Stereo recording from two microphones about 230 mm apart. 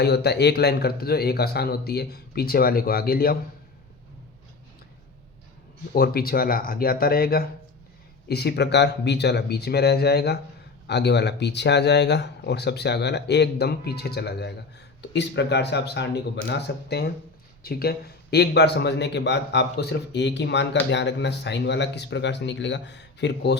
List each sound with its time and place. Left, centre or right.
0.0 s speech: left
5.9 s speech: left